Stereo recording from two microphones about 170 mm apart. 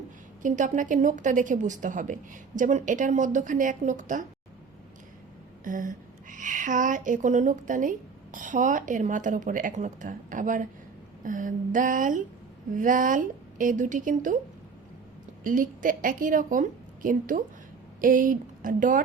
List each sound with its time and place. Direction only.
0.4 s a woman's voice: 45° right (ahead or behind)
5.6 s a woman's voice: 50° right (ahead or behind)
15.4 s a woman's voice: 50° right (ahead or behind)